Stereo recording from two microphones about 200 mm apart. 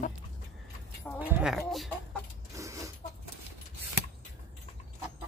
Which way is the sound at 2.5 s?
15° right (ahead or behind).